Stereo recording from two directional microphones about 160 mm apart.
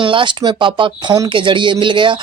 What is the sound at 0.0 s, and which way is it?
Speech, 30° right (ahead or behind).